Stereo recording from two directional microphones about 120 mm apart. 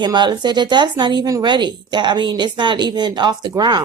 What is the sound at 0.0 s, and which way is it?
A woman's voice, 35° right (ahead or behind).